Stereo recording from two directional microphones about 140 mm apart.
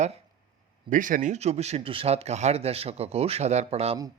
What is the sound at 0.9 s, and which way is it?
Speech, 70° right (ahead or behind).